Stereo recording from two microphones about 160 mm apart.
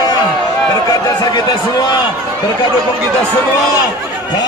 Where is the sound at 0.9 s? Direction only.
25° left (ahead or behind).